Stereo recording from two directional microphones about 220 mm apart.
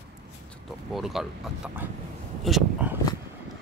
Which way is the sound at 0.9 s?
Centre (ahead or behind).